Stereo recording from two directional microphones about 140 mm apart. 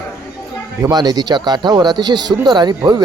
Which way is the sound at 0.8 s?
30° right (ahead or behind).